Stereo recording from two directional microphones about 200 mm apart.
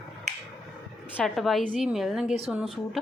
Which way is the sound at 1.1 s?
Centre (ahead or behind).